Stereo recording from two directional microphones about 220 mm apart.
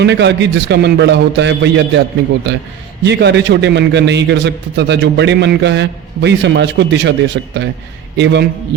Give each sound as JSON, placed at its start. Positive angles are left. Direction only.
{"t": 0.0, "sound": "a man's voice", "side_deg": -50}
{"t": 3.0, "sound": "a man's voice", "side_deg": -50}